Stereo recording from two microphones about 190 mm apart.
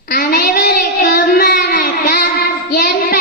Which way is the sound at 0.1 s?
55° left (ahead or behind).